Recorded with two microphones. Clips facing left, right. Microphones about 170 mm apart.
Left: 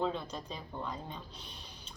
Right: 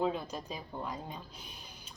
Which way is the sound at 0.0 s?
10° right (ahead or behind).